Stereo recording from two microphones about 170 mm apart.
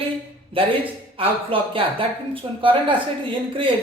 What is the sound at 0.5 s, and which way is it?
Speech, 35° right (ahead or behind).